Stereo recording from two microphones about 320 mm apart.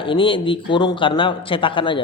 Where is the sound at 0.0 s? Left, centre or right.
Centre.